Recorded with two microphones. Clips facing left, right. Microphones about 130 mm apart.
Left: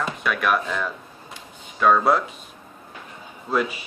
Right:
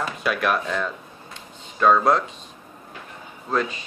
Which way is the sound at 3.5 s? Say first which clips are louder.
Left 1 dB; 10° left (ahead or behind).